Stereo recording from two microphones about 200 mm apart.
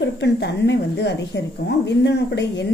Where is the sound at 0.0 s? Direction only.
60° left (ahead or behind).